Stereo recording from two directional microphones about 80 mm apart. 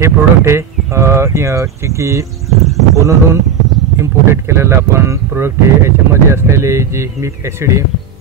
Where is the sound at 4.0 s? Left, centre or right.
Right.